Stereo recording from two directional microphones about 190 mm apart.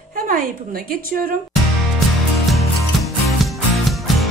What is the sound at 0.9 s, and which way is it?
Speech, 50° right (ahead or behind).